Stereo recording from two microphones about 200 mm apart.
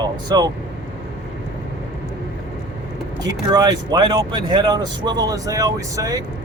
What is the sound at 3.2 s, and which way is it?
Speech, 20° right (ahead or behind).